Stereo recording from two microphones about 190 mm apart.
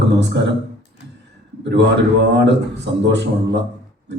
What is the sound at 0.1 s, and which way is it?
Speech, 70° right (ahead or behind).